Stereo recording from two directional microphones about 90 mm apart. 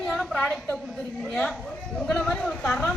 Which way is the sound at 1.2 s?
5° left (ahead or behind).